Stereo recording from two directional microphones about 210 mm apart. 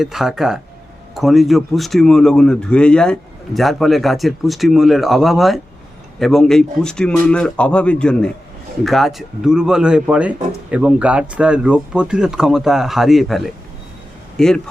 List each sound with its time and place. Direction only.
0.0 s speech: centre (ahead or behind)